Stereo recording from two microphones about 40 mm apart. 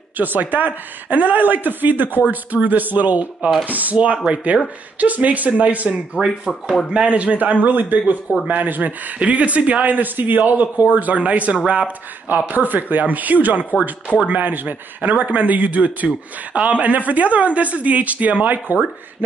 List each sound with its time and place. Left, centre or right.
0.2 s speech: right
5.9 s speech: centre
7.2 s speech: right
7.6 s speech: right
9.2 s speech: right
11.5 s speech: right
12.4 s speech: right
14.1 s speech: right
14.4 s speech: right